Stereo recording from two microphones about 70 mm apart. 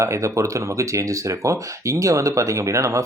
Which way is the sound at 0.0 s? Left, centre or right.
Right.